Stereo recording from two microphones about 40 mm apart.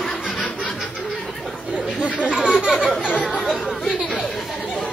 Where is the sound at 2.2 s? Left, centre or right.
Right.